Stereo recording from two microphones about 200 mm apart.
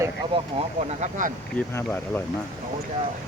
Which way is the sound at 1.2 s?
40° right (ahead or behind).